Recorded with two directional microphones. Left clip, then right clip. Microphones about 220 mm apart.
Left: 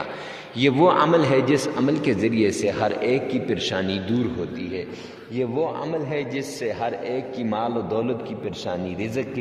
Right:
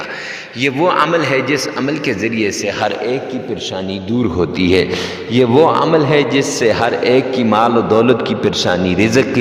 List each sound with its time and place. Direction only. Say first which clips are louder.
0.6 s a man's voice: right 4 dB; 5° left (ahead or behind)
4.4 s a man's voice: right 16 dB; 50° right (ahead or behind)